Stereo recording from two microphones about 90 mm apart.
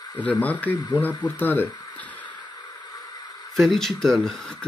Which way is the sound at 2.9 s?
45° left (ahead or behind).